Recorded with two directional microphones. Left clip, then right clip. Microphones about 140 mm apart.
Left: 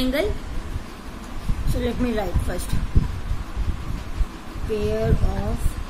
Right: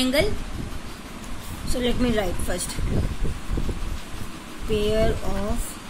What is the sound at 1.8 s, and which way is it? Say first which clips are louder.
Speech: right 1 dB; 30° right (ahead or behind).